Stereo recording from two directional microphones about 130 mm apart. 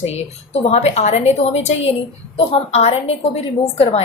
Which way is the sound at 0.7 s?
55° left (ahead or behind).